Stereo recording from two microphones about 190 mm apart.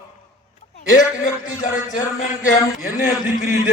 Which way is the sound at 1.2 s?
45° left (ahead or behind).